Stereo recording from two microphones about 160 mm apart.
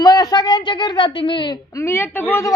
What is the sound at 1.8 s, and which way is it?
Speech, 15° left (ahead or behind).